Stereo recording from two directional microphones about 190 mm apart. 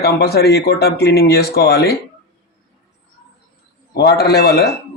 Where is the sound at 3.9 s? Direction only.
60° left (ahead or behind).